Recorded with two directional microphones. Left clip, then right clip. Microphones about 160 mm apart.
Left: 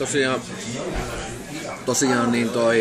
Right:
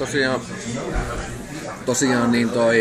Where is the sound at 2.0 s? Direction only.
15° left (ahead or behind).